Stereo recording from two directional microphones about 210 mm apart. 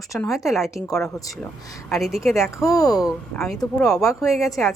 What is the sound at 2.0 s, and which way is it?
Speech, centre (ahead or behind).